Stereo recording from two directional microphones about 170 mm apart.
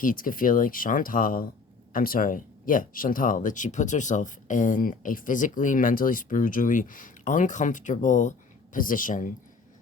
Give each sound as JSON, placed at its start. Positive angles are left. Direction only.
{"t": 0.0, "sound": "speech", "side_deg": 55}